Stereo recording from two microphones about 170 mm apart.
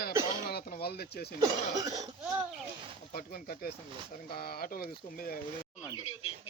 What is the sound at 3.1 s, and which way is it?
Speech, 60° left (ahead or behind).